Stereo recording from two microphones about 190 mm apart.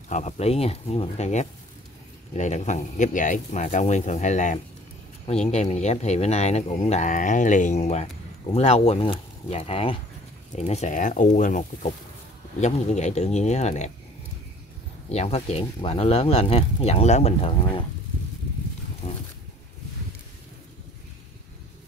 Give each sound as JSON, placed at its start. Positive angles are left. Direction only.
{"t": 0.1, "sound": "speech", "side_deg": 35}
{"t": 15.0, "sound": "speech", "side_deg": 30}